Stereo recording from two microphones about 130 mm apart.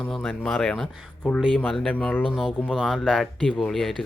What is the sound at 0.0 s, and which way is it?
Speech, 5° left (ahead or behind).